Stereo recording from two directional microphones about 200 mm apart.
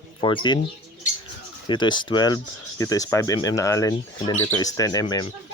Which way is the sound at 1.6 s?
20° left (ahead or behind).